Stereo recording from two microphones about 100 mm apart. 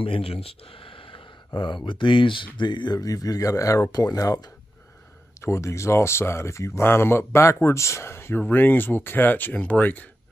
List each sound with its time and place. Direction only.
0.0 s speech: 70° left (ahead or behind); by 10.0 s 15° left (ahead or behind)